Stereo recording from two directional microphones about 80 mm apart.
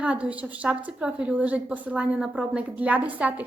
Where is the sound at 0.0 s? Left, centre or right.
Centre.